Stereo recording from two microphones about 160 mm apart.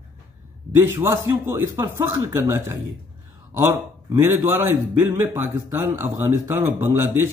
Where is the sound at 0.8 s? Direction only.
15° right (ahead or behind).